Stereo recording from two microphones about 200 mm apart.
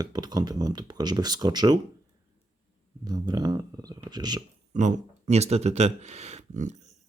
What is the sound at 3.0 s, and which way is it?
Speech, 20° right (ahead or behind).